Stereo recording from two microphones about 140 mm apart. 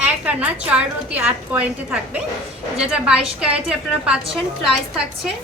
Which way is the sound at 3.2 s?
45° right (ahead or behind).